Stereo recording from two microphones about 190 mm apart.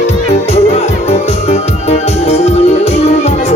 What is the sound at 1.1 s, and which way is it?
Music, 35° left (ahead or behind).